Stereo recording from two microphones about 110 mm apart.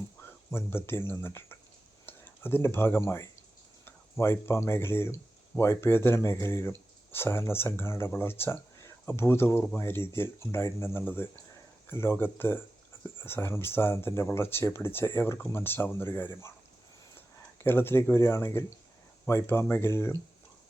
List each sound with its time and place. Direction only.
0.2 s speech: 20° left (ahead or behind)